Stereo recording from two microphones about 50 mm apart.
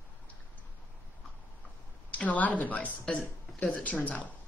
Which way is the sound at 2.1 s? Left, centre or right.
Left.